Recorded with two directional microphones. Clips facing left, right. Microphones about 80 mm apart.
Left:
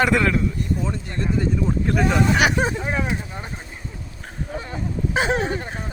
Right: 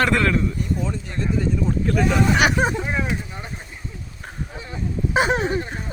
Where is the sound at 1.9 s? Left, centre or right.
Centre.